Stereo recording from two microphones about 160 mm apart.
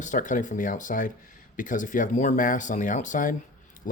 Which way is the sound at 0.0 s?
50° left (ahead or behind).